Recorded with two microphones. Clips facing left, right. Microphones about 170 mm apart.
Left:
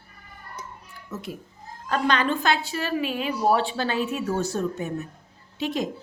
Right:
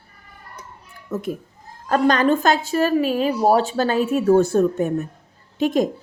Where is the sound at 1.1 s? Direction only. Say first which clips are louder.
Right 9 dB; 55° right (ahead or behind).